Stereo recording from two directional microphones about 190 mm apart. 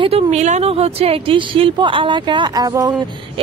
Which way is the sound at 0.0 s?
35° right (ahead or behind).